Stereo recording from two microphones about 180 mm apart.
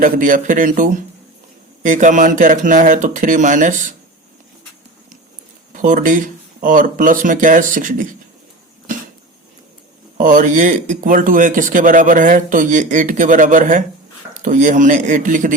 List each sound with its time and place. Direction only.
0.0 s speech: 50° right (ahead or behind)
5.7 s speech: 45° right (ahead or behind)
10.2 s speech: 45° right (ahead or behind)